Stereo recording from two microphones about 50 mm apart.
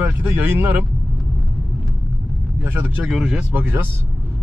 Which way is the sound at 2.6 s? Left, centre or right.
Right.